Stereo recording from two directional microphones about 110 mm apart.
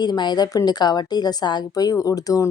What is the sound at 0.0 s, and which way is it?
A woman's voice, 40° left (ahead or behind).